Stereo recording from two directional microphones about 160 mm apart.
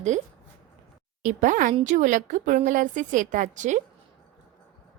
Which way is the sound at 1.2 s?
50° right (ahead or behind).